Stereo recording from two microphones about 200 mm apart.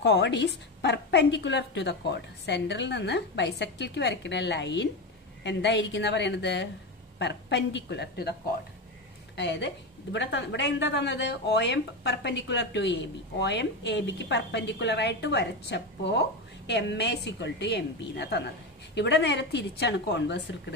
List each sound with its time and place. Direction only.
0.0 s speech: 60° left (ahead or behind)
9.4 s speech: 60° left (ahead or behind)